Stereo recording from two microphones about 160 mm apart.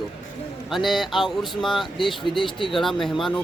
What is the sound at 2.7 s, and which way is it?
Speech, centre (ahead or behind).